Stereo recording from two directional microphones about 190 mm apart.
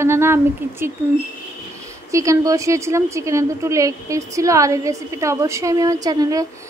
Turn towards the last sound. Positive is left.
turn(degrees=-20)  # may be behind; listen again after turning